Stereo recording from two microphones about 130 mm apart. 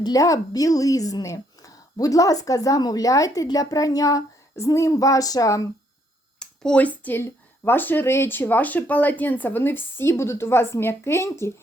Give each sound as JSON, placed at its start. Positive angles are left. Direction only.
{"t": 0.0, "sound": "a woman's voice", "side_deg": 25}
{"t": 6.4, "sound": "speech", "side_deg": 5}